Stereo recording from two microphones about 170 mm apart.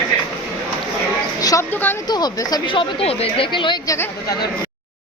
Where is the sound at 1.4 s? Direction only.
20° left (ahead or behind).